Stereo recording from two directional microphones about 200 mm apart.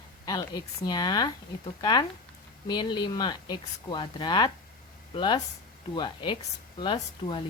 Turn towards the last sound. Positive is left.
turn(degrees=20)  # may be behind; listen again after turning